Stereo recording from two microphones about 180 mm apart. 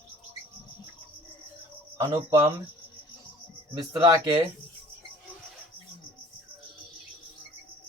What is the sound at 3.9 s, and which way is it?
Speech, 20° right (ahead or behind).